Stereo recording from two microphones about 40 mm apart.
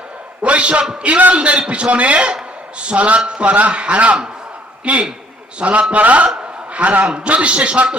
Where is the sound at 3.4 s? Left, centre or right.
Right.